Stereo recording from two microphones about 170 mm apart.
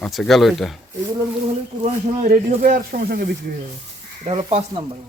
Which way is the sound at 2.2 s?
50° right (ahead or behind).